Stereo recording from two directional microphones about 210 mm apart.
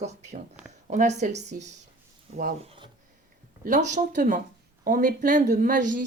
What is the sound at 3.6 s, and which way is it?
Speech, 35° right (ahead or behind).